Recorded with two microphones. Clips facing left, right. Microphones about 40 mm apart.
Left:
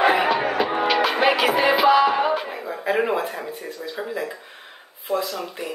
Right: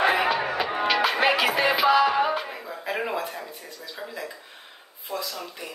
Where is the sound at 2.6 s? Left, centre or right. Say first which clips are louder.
Left 6 dB; left.